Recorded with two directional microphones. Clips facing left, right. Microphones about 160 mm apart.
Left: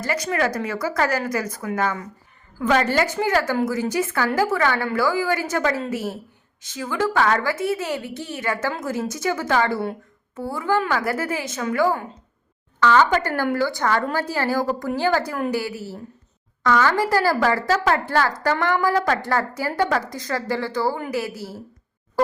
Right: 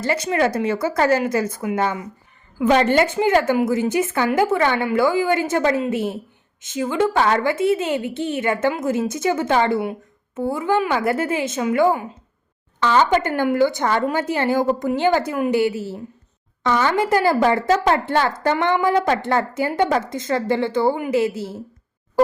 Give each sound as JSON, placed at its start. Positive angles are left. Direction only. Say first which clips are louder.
{"t": 0.0, "sound": "a woman's voice", "louder": "right 3 dB", "side_deg": -25}